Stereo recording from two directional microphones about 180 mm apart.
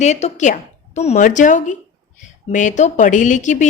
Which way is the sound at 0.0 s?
40° left (ahead or behind).